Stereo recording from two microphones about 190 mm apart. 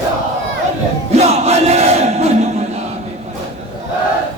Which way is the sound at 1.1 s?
35° right (ahead or behind).